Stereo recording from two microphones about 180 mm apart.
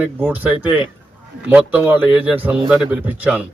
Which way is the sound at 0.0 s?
10° right (ahead or behind).